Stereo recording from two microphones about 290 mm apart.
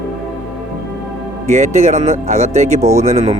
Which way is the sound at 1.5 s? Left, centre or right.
Right.